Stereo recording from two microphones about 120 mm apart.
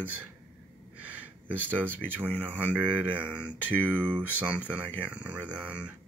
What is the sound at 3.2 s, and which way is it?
Speech, 10° right (ahead or behind).